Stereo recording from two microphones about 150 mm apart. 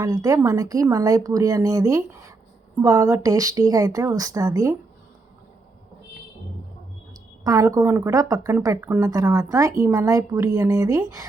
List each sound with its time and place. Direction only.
0.0 s a woman's voice: 25° right (ahead or behind)
7.1 s a woman's voice: 25° right (ahead or behind)